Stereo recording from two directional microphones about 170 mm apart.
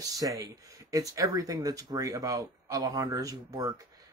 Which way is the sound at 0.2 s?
20° right (ahead or behind).